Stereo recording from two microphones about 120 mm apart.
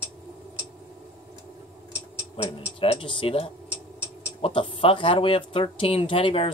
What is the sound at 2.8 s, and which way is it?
Speech, 50° left (ahead or behind).